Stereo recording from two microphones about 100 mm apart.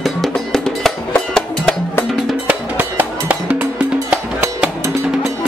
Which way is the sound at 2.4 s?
20° right (ahead or behind).